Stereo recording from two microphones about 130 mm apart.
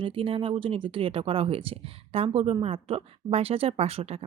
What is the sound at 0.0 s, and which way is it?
Speech, 45° right (ahead or behind).